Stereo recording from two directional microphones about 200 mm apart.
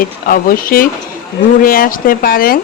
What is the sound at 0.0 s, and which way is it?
Speech, 45° left (ahead or behind).